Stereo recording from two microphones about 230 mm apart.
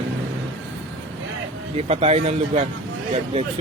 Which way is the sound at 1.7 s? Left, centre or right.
Right.